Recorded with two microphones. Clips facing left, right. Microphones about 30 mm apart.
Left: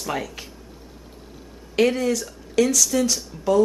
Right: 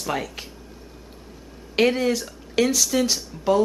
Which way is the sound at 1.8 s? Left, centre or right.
Centre.